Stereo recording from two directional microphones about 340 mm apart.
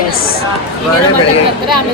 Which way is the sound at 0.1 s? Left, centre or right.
Left.